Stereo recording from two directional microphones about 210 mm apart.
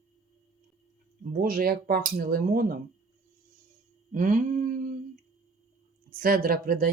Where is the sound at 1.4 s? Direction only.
45° right (ahead or behind).